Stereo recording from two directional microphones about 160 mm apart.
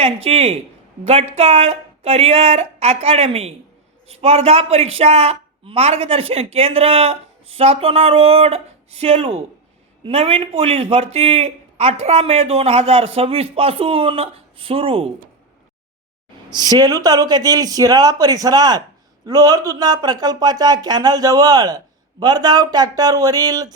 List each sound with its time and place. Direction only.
0.0 s a woman's voice: 40° right (ahead or behind)
16.5 s speech: 25° right (ahead or behind)